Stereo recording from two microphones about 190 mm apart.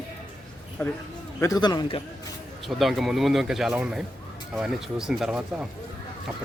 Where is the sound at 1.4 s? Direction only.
20° left (ahead or behind).